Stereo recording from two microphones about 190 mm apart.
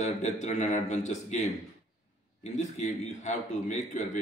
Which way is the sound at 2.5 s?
40° left (ahead or behind).